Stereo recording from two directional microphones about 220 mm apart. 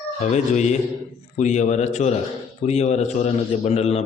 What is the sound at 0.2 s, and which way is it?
A man's voice, 30° left (ahead or behind).